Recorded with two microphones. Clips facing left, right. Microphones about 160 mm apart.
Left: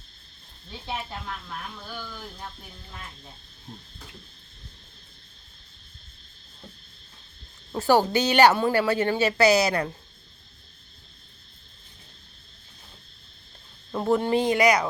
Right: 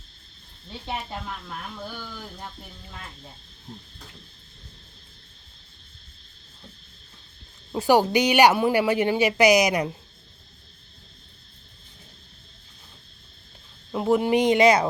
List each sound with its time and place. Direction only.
7.7 s a woman's voice: 15° right (ahead or behind)
13.9 s a woman's voice: 10° right (ahead or behind); by 14.8 s 25° right (ahead or behind)